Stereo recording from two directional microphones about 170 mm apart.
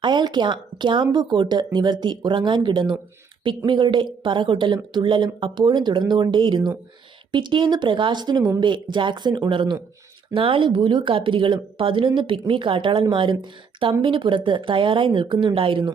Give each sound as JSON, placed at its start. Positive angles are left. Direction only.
{"t": 0.0, "sound": "speech", "side_deg": -25}